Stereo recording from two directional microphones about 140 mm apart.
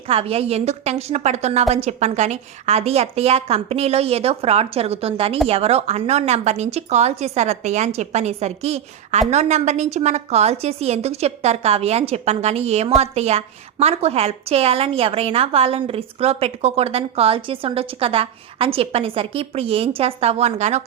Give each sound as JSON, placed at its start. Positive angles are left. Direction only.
{"t": 0.1, "sound": "a woman's voice", "side_deg": -45}